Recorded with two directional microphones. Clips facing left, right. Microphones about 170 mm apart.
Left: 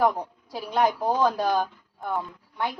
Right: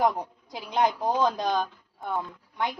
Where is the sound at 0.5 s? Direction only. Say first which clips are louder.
Left 2 dB; 20° right (ahead or behind).